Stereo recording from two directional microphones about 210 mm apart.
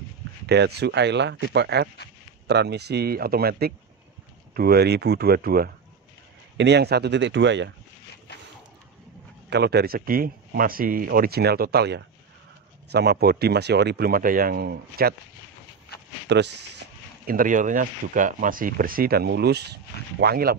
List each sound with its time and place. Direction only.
0.5 s speech: 50° right (ahead or behind)
9.5 s speech: 50° right (ahead or behind)
16.3 s speech: 55° right (ahead or behind)
17.3 s speech: 40° right (ahead or behind)